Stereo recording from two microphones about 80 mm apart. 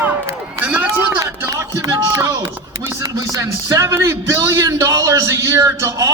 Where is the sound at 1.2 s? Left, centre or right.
Right.